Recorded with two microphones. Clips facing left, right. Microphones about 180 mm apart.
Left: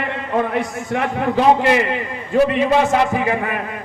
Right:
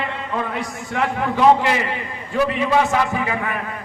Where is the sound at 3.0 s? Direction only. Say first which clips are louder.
Left 4 dB; 25° left (ahead or behind).